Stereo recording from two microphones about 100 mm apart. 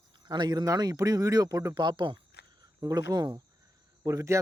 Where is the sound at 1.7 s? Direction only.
50° right (ahead or behind).